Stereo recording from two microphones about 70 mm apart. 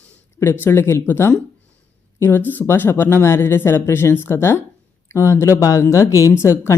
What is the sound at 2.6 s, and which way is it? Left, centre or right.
A man's voice, left.